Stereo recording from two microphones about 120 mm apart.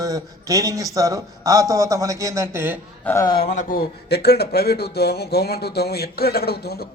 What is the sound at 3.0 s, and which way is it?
Speech, 25° left (ahead or behind).